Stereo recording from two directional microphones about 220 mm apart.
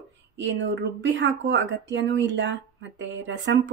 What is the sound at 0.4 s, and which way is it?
Speech, 55° right (ahead or behind).